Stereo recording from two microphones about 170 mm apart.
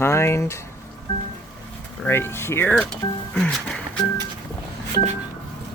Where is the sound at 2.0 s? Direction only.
15° left (ahead or behind).